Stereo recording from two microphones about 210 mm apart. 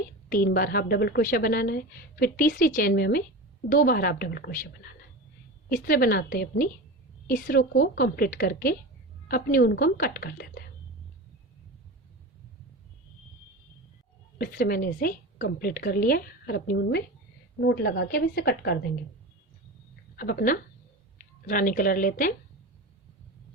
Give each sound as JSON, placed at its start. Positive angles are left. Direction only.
{"t": 0.3, "sound": "a woman's voice", "side_deg": 45}
{"t": 14.3, "sound": "a woman's voice", "side_deg": 45}
{"t": 20.1, "sound": "a woman's voice", "side_deg": 45}